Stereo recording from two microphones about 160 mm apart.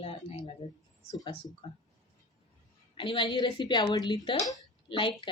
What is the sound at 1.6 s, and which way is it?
Speech, 30° left (ahead or behind).